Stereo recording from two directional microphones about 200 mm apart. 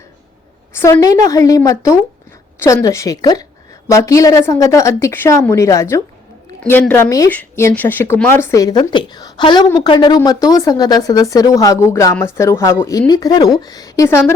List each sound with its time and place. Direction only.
0.7 s speech: 15° left (ahead or behind)